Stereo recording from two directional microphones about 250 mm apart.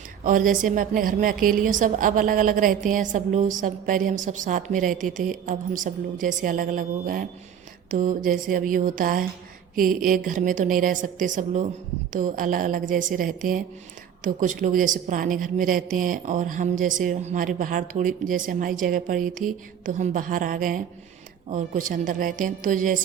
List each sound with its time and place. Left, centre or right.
0.3 s a woman's voice: right